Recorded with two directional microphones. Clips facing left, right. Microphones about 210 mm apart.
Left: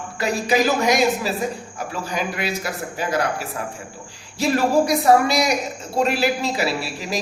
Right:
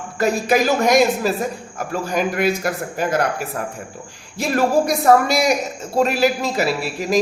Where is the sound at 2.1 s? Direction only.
50° right (ahead or behind).